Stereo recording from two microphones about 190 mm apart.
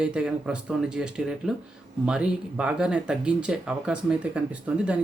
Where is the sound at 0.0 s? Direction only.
5° right (ahead or behind).